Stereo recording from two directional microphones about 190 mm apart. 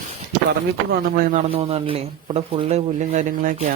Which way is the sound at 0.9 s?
50° right (ahead or behind).